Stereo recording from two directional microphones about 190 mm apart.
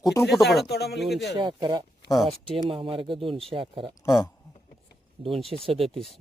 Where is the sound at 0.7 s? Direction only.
60° left (ahead or behind).